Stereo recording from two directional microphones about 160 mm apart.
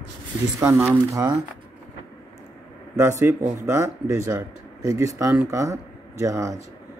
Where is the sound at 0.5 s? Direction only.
10° right (ahead or behind).